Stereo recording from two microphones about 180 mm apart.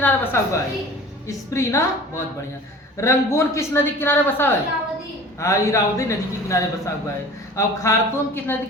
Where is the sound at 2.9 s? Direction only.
15° left (ahead or behind).